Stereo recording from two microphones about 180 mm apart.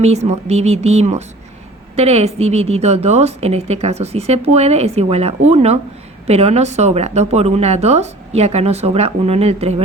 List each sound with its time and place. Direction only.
0.0 s a woman's voice: 35° right (ahead or behind)